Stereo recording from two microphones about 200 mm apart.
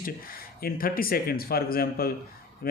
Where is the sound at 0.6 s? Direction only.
45° left (ahead or behind).